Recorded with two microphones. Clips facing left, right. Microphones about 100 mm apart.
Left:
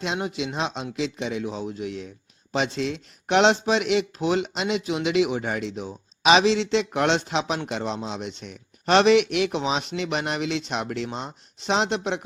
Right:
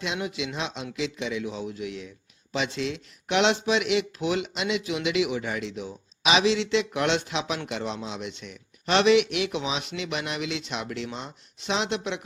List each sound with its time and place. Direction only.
0.0 s speech: 40° left (ahead or behind)